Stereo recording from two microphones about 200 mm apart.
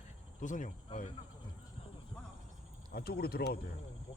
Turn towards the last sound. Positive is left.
turn(degrees=50)  # may be behind; listen again after turning